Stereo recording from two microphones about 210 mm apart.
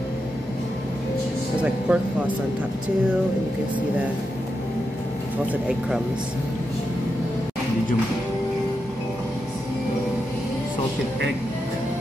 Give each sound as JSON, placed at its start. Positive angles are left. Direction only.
{"t": 1.6, "sound": "a man's voice", "side_deg": -5}
{"t": 5.5, "sound": "a man's voice", "side_deg": -5}